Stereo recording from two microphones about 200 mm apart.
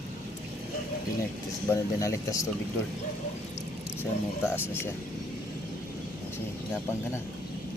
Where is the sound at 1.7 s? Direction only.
15° left (ahead or behind).